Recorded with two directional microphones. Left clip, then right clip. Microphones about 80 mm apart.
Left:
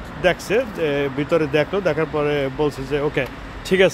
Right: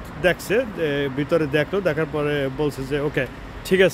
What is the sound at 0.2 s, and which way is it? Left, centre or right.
Speech, right.